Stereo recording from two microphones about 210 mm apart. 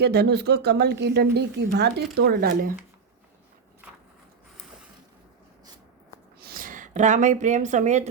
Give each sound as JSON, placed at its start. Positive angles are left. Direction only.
{"t": 0.0, "sound": "speech", "side_deg": -50}
{"t": 6.4, "sound": "speech", "side_deg": -40}